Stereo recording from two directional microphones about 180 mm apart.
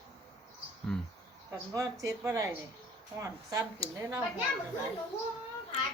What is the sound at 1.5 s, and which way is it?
Speech, 20° right (ahead or behind).